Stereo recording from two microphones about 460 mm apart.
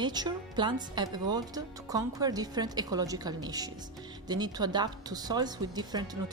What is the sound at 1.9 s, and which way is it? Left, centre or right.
Speech, centre.